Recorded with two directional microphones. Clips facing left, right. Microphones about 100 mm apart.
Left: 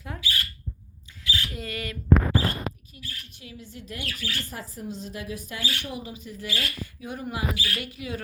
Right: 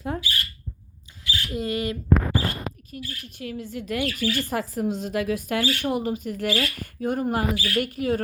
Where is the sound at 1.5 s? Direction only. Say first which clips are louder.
Right 8 dB; 20° right (ahead or behind).